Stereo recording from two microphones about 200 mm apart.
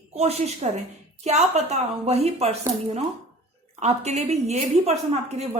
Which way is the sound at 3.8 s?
35° right (ahead or behind).